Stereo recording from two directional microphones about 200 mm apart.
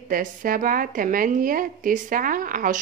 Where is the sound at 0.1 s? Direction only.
40° right (ahead or behind).